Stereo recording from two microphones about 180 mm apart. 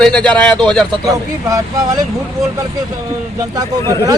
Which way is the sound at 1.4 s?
20° right (ahead or behind).